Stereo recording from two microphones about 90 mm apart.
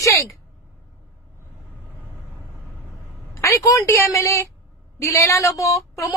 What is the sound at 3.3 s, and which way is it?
A woman's voice, 35° left (ahead or behind).